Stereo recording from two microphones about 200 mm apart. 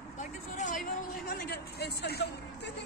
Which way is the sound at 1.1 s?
45° left (ahead or behind).